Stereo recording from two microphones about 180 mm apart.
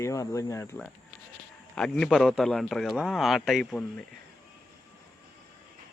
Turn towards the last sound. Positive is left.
turn(degrees=5)  # may be behind; listen again after turning